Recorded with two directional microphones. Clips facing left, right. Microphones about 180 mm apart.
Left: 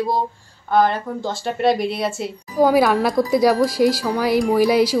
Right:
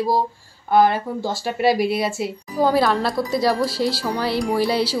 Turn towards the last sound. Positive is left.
turn(degrees=15)  # may be behind; listen again after turning